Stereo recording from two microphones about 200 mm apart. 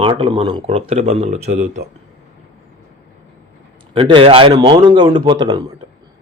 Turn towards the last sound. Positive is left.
turn(degrees=-20)  # may be behind; listen again after turning